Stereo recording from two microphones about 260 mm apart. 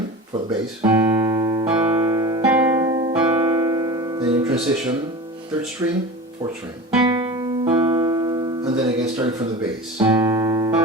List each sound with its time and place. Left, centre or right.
0.8 s music: centre
5.8 s speech: centre
7.0 s music: centre